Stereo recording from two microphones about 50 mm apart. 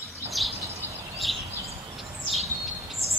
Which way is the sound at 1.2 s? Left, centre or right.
Centre.